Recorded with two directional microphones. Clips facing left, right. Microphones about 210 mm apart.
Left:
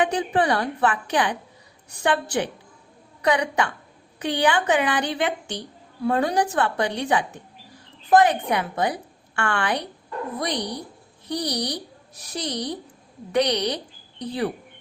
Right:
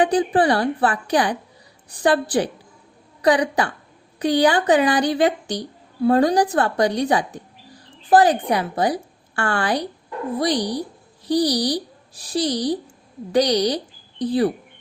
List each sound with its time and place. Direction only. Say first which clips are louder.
0.0 s a woman's voice: right 4 dB; 35° right (ahead or behind)